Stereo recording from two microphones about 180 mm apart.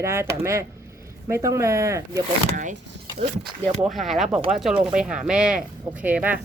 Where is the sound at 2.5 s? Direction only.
45° right (ahead or behind).